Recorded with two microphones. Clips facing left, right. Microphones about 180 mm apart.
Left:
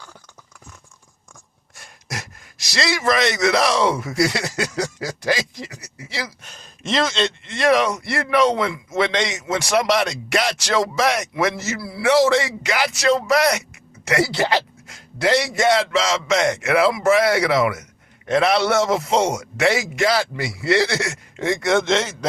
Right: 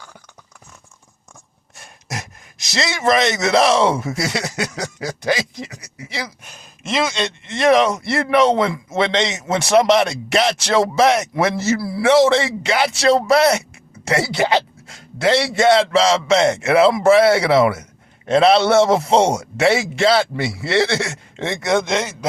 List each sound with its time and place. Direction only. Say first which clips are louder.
1.7 s speech: right 2 dB; 20° right (ahead or behind)
6.4 s a man's voice: left 1 dB; 10° right (ahead or behind); by 12.0 s 35° right (ahead or behind)
12.0 s a man's voice: right 2 dB; 25° right (ahead or behind)